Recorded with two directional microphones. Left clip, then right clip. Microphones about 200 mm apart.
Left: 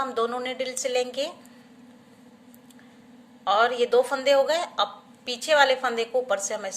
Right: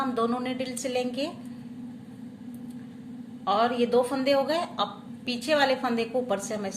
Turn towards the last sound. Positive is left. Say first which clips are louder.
# left 3 dB
turn(degrees=35)  # may be behind; listen again after turning